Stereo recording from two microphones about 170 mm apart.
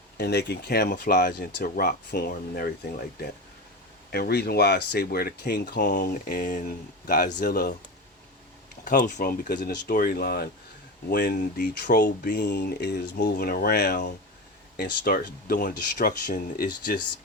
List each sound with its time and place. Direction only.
0.2 s speech: 80° left; by 2.7 s 60° left (ahead or behind)
4.1 s speech: 70° left (ahead or behind)
8.8 s speech: 50° left (ahead or behind); by 9.9 s 70° left (ahead or behind)
9.9 s speech: 55° left (ahead or behind)